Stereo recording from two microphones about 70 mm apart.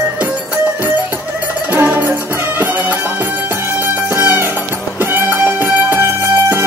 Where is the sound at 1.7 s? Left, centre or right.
Right.